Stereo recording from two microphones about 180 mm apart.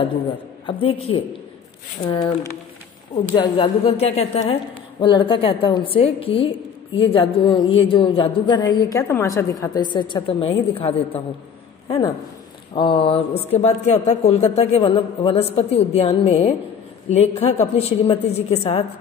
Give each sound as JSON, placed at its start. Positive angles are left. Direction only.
{"t": 0.7, "sound": "a woman's voice", "side_deg": 30}
{"t": 2.0, "sound": "a woman's voice", "side_deg": 20}
{"t": 5.0, "sound": "speech", "side_deg": 25}
{"t": 12.7, "sound": "a woman's voice", "side_deg": 30}